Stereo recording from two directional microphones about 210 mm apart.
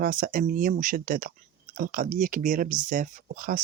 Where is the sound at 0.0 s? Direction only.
40° right (ahead or behind).